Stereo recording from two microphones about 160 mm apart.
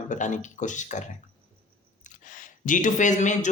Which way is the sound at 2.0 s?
50° left (ahead or behind).